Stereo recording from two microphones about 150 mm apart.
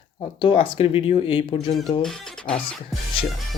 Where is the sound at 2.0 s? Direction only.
5° left (ahead or behind).